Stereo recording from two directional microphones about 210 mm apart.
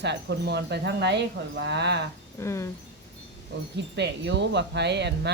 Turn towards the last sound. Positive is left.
turn(degrees=-55)  # may be behind; listen again after turning